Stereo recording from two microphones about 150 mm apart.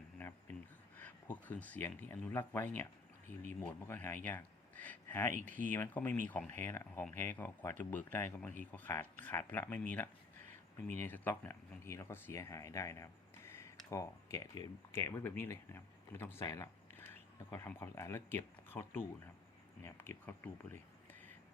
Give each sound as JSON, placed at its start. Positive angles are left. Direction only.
{"t": 0.2, "sound": "a sound", "side_deg": 15}
{"t": 0.9, "sound": "speech", "side_deg": 10}
{"t": 5.5, "sound": "speech", "side_deg": -60}
{"t": 5.7, "sound": "speech", "side_deg": 15}